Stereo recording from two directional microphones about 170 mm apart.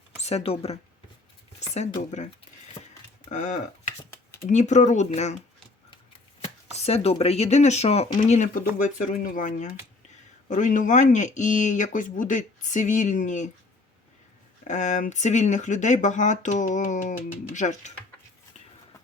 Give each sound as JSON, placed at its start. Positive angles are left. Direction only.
{"t": 0.2, "sound": "speech", "side_deg": 35}
{"t": 1.5, "sound": "a sound", "side_deg": 40}
{"t": 2.0, "sound": "speech", "side_deg": 45}
{"t": 6.4, "sound": "speech", "side_deg": 40}
{"t": 14.6, "sound": "speech", "side_deg": 45}